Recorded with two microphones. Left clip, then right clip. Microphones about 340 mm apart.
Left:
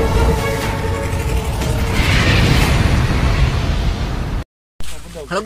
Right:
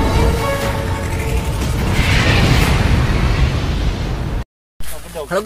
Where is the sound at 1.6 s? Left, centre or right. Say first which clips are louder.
Even; centre.